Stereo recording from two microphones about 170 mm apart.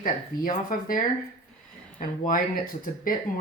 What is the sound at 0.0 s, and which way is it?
Speech, 55° left (ahead or behind).